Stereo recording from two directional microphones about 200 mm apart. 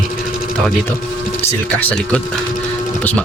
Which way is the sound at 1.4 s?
5° left (ahead or behind).